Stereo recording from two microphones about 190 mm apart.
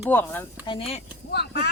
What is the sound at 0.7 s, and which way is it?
Speech, 30° left (ahead or behind).